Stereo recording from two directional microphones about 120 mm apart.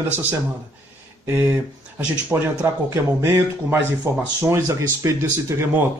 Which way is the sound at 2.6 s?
25° right (ahead or behind).